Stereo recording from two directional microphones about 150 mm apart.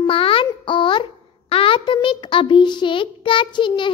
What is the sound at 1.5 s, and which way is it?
A child's voice, 35° left (ahead or behind).